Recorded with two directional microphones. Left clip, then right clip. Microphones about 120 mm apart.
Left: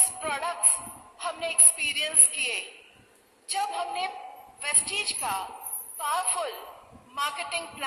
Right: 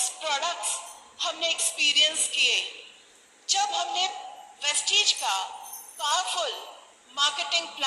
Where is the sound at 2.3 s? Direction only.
40° left (ahead or behind).